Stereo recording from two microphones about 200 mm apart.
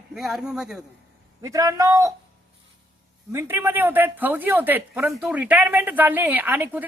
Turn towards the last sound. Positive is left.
turn(degrees=-10)  # may be behind; listen again after turning